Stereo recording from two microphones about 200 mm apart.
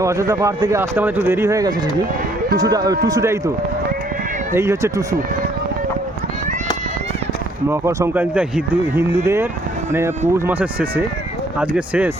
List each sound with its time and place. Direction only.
0.0 s speech: 15° right (ahead or behind)
4.5 s speech: 15° right (ahead or behind)
7.7 s speech: 15° right (ahead or behind)